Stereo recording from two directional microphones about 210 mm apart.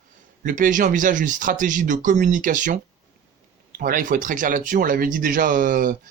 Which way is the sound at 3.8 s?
40° right (ahead or behind).